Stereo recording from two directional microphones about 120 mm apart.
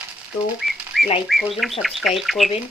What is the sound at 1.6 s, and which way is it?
Speech, centre (ahead or behind).